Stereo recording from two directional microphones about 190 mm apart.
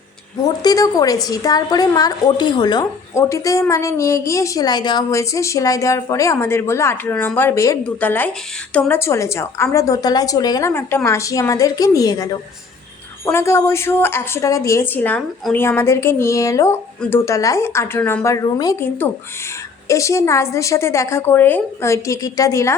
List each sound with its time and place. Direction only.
0.4 s a woman's voice: 20° left (ahead or behind)